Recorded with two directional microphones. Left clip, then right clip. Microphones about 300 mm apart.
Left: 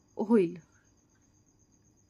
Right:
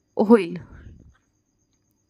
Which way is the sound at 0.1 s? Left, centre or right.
Right.